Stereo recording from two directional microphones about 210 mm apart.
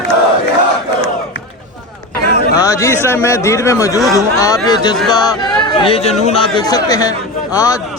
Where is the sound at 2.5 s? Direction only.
15° left (ahead or behind).